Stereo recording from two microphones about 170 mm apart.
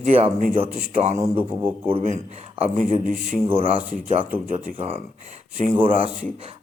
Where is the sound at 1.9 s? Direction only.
40° right (ahead or behind).